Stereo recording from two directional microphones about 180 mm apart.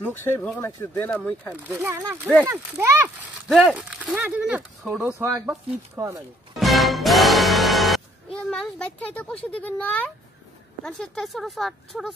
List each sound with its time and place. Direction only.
0.0 s speech: 10° left (ahead or behind)
1.5 s speech: 10° right (ahead or behind)
3.4 s speech: centre (ahead or behind); by 6.2 s 20° right (ahead or behind)
6.6 s music: centre (ahead or behind)
10.8 s speech: 5° left (ahead or behind)